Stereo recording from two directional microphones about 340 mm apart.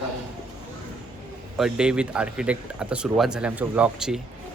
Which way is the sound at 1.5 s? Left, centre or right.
Centre.